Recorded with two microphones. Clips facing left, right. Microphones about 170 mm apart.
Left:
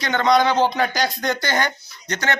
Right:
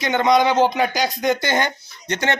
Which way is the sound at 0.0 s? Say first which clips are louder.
Right 1 dB; 20° right (ahead or behind).